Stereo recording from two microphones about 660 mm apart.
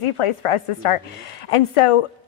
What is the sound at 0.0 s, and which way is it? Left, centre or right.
A woman's voice, left.